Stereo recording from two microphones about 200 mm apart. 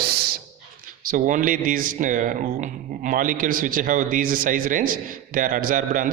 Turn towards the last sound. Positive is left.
turn(degrees=-40)  # may be behind; listen again after turning